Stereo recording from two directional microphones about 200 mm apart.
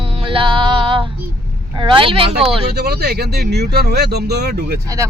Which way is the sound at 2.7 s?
55° right (ahead or behind).